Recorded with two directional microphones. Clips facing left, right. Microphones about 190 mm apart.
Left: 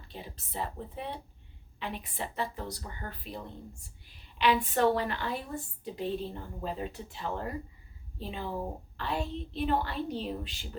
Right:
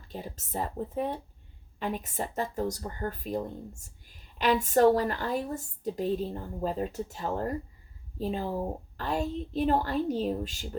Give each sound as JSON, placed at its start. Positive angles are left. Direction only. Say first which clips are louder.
{"t": 0.1, "sound": "a woman's voice", "louder": "right 6 dB", "side_deg": -45}